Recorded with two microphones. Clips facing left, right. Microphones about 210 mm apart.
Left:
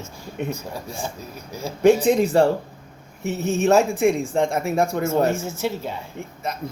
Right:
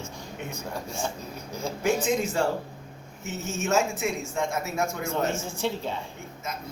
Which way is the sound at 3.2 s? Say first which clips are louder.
Left 10 dB; 60° left (ahead or behind).